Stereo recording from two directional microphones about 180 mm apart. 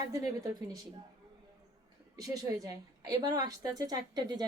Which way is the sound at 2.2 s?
20° right (ahead or behind).